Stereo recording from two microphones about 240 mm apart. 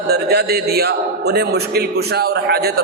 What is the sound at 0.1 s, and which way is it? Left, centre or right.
A man's voice, right.